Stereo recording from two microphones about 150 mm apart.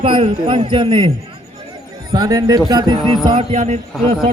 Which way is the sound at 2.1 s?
25° right (ahead or behind).